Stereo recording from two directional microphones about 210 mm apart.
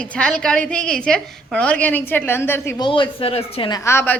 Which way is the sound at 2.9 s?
25° left (ahead or behind).